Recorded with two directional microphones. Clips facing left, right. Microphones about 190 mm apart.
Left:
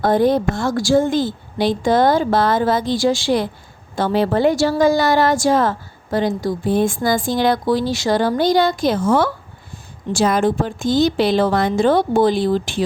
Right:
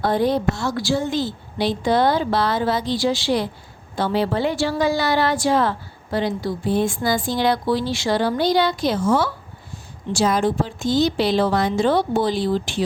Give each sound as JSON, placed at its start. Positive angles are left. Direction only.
{"t": 0.0, "sound": "a woman's voice", "side_deg": 45}